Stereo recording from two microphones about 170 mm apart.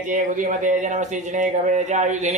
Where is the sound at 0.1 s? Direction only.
50° right (ahead or behind).